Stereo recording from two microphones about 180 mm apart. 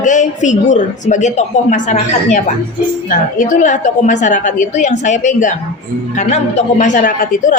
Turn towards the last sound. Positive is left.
turn(degrees=45)  # may be behind; listen again after turning